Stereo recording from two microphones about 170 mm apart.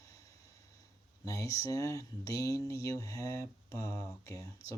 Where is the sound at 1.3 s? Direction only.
20° left (ahead or behind).